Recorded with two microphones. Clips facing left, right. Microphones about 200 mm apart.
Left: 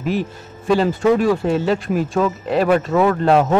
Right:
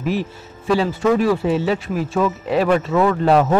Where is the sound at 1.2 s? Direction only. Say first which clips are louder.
Left 1 dB; 5° right (ahead or behind).